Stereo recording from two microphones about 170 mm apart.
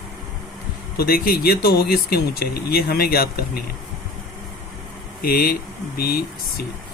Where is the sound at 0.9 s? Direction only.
60° left (ahead or behind).